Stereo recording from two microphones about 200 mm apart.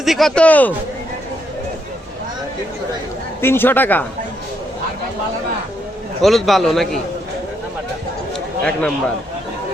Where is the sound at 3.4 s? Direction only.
10° left (ahead or behind).